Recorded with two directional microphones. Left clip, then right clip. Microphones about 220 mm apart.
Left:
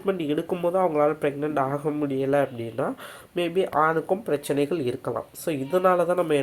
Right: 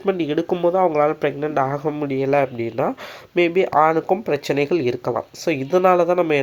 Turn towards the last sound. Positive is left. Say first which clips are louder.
# right 5 dB
turn(degrees=-30)  # may be behind; listen again after turning